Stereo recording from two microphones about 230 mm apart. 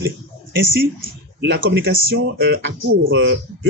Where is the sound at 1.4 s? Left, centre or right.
Right.